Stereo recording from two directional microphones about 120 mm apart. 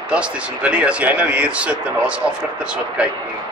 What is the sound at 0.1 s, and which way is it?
Speech, 10° right (ahead or behind).